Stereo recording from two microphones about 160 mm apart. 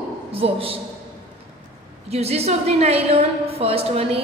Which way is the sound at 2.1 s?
40° right (ahead or behind).